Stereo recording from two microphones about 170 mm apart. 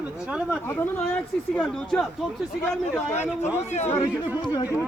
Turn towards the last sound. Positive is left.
turn(degrees=45)  # may be behind; listen again after turning